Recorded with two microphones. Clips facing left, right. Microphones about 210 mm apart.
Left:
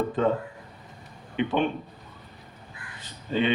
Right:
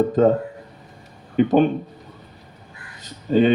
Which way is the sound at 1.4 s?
40° right (ahead or behind).